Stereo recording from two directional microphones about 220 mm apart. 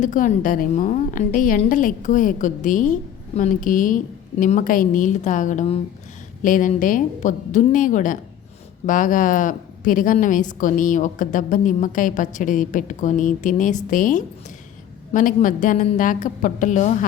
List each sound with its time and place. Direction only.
0.0 s a woman's voice: 35° left (ahead or behind)